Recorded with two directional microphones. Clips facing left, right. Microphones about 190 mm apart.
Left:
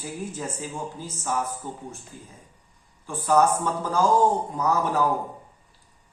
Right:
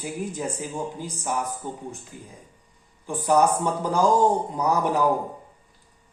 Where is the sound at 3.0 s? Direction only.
15° right (ahead or behind).